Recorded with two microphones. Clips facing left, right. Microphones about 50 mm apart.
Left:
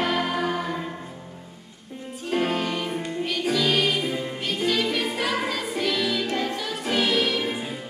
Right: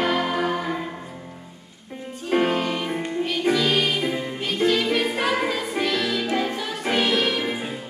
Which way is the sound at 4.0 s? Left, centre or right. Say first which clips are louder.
Right 2 dB; right.